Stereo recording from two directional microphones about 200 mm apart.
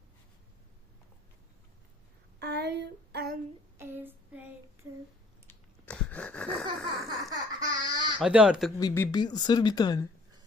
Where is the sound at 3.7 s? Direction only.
10° right (ahead or behind).